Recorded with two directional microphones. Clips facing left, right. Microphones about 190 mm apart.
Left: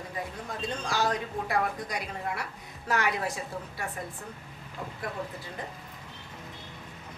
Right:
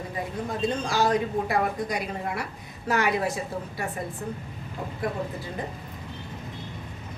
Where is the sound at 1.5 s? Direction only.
10° right (ahead or behind).